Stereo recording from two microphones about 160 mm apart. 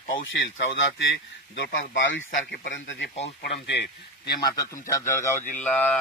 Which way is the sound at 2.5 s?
80° left.